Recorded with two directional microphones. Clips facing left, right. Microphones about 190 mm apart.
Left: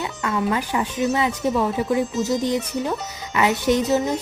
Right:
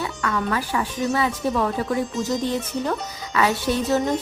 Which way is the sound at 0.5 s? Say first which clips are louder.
Left 1 dB; 20° left (ahead or behind).